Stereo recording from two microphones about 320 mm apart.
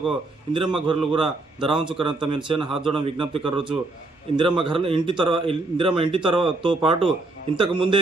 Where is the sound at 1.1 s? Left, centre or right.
Centre.